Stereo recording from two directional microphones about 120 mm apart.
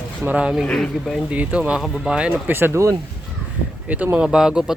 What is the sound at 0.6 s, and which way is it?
Speech, 5° left (ahead or behind).